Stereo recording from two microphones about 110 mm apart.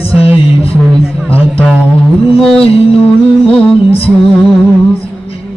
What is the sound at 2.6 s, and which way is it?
Music, 60° left (ahead or behind).